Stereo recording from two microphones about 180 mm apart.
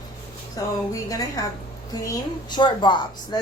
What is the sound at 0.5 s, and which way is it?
A woman's voice, 20° left (ahead or behind).